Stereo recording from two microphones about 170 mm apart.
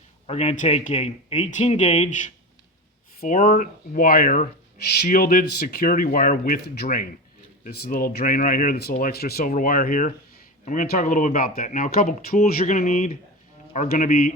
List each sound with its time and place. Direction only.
0.3 s speech: 40° left (ahead or behind); by 12.4 s 55° left (ahead or behind)
12.5 s speech: 45° left (ahead or behind)